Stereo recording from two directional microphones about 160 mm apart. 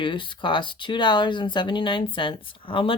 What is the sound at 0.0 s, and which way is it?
Speech, 30° left (ahead or behind).